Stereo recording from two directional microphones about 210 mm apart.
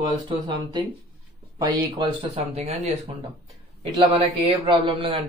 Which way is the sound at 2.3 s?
30° right (ahead or behind).